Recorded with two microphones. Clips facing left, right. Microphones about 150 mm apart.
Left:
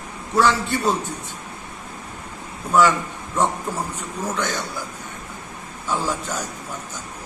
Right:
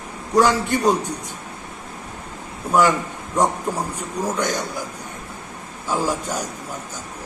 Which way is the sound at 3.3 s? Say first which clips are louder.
Right 2 dB; 15° right (ahead or behind).